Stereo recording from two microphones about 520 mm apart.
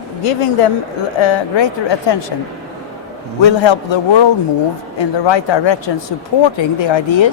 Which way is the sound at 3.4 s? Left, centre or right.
Left.